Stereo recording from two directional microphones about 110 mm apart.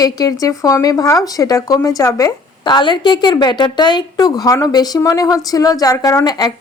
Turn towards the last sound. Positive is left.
turn(degrees=35)  # may be behind; listen again after turning